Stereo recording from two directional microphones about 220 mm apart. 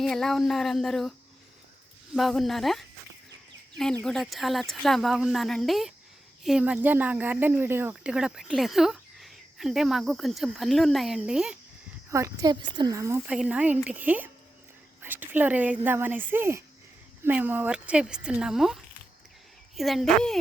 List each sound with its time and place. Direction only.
0.0 s speech: centre (ahead or behind)
2.1 s speech: centre (ahead or behind)
4.0 s speech: centre (ahead or behind)
12.1 s a woman's voice: 15° right (ahead or behind); by 20.4 s centre (ahead or behind)